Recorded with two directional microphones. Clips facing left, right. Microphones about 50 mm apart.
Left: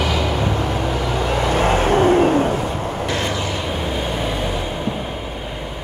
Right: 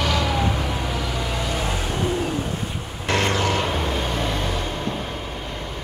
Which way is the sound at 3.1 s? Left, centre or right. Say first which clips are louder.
Right 5 dB; right.